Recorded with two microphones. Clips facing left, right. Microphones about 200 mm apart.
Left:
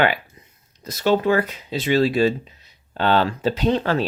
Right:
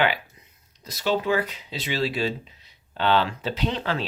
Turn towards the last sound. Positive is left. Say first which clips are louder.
# left 7 dB
turn(degrees=45)  # may be behind; listen again after turning